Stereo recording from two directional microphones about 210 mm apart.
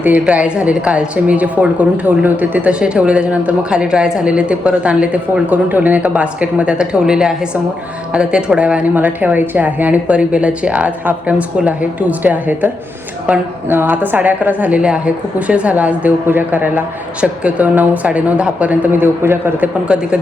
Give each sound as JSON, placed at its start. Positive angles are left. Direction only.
{"t": 0.0, "sound": "a woman's voice", "side_deg": -5}